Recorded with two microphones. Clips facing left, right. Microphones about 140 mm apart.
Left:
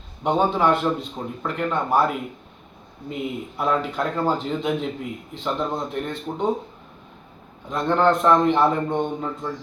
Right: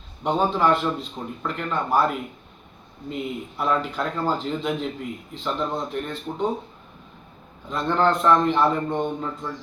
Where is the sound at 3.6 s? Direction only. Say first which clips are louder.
Left 1 dB; 10° left (ahead or behind).